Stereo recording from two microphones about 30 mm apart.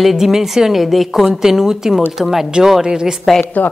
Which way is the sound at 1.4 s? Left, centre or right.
Centre.